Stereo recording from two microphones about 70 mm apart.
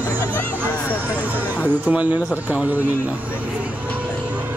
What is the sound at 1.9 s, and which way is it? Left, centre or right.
Speech, right.